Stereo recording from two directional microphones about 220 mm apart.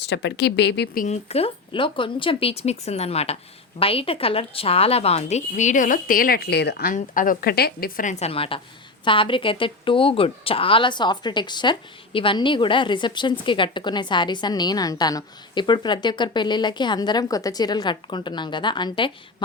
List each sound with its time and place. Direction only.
0.0 s speech: 50° left (ahead or behind)
1.0 s speech: 30° left (ahead or behind)